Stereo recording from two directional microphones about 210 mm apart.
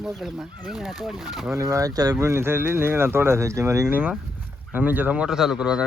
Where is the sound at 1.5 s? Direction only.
15° right (ahead or behind).